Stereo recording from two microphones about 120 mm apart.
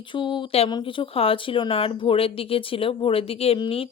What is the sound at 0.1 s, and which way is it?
Speech, 40° left (ahead or behind).